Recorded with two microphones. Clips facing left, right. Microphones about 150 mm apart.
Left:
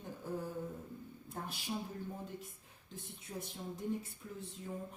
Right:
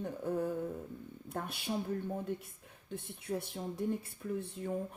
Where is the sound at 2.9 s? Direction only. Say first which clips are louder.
Right 9 dB; 65° right (ahead or behind).